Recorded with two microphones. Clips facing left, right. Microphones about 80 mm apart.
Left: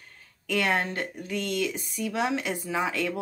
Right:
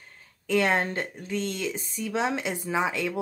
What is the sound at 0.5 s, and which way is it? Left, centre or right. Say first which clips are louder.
Speech: right 2 dB; right.